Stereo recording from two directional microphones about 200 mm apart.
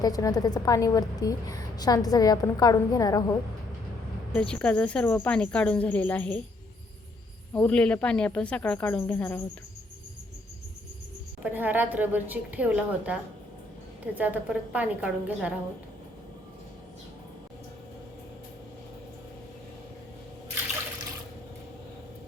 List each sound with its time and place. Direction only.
0.0 s a woman's voice: 20° left (ahead or behind)
4.4 s speech: 5° left (ahead or behind)
7.5 s speech: 5° left (ahead or behind)
11.4 s a woman's voice: 10° right (ahead or behind)